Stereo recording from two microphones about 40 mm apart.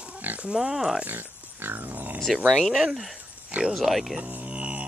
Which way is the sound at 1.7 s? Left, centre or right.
Right.